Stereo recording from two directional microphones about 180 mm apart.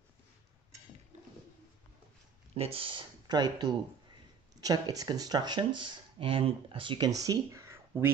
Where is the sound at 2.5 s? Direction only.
30° right (ahead or behind).